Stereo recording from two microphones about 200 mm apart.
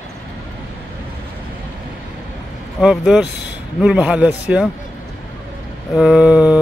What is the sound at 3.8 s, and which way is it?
Speech, 5° right (ahead or behind).